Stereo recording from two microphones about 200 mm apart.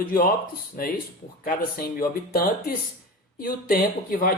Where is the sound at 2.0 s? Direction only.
45° left (ahead or behind).